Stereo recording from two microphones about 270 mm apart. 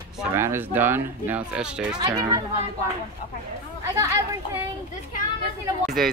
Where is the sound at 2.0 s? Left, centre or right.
Centre.